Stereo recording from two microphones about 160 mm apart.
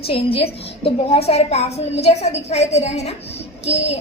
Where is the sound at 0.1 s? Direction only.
35° left (ahead or behind).